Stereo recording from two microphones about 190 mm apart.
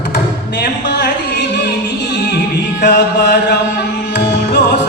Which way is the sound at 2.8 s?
60° left (ahead or behind).